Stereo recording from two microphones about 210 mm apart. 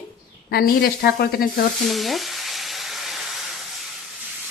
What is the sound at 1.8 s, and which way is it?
Frying, centre (ahead or behind).